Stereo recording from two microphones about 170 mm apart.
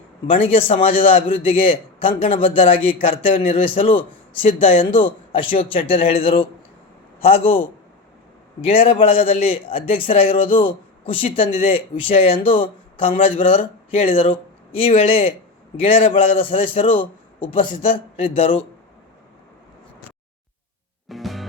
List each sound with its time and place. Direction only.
0.3 s a man's voice: 35° left (ahead or behind)
8.6 s a man's voice: 35° left (ahead or behind)
21.1 s music: centre (ahead or behind)